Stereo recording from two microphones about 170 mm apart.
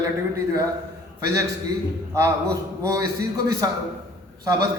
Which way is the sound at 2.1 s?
20° right (ahead or behind).